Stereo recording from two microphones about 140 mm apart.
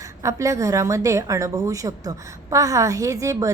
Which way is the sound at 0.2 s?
20° right (ahead or behind).